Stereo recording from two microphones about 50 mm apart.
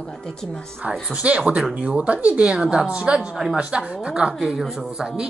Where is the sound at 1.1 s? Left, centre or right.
Right; by 3.5 s centre.